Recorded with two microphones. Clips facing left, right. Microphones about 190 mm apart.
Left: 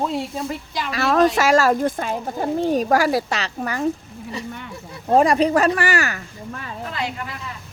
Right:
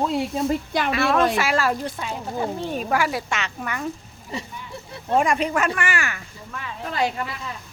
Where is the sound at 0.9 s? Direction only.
40° left (ahead or behind).